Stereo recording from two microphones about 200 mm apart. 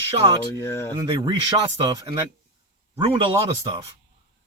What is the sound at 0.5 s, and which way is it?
Speech, 15° left (ahead or behind).